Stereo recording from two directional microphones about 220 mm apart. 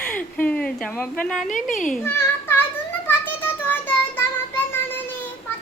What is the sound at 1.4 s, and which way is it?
Speech, 35° left (ahead or behind).